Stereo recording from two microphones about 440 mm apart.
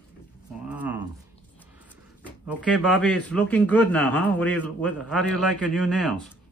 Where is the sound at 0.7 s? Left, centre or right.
Centre.